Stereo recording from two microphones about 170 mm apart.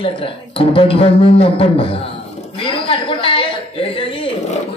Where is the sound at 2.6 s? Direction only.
30° left (ahead or behind).